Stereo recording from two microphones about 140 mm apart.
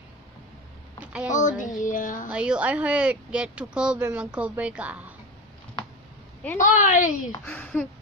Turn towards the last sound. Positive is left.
turn(degrees=10)  # may be behind; listen again after turning